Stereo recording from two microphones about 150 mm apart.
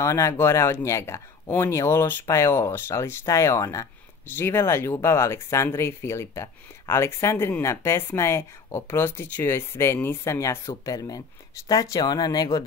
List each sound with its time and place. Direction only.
0.0 s speech: 20° left (ahead or behind)